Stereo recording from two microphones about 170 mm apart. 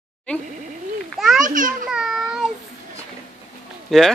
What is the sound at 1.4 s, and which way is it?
Speech, 50° right (ahead or behind).